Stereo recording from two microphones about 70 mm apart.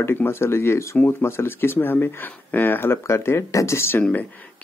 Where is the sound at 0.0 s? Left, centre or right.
Left.